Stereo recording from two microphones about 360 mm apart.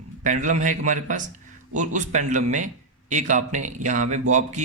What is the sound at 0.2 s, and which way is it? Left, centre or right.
Speech, right.